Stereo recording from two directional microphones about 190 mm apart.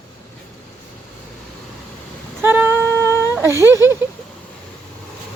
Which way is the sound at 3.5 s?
15° left (ahead or behind).